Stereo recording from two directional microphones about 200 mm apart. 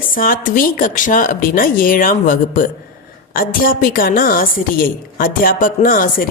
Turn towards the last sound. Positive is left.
turn(degrees=45)  # may be behind; listen again after turning